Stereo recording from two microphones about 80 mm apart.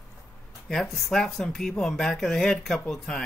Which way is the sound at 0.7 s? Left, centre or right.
Centre.